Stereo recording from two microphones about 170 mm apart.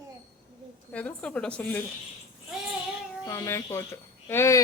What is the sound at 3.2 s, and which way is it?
Speech, 20° left (ahead or behind).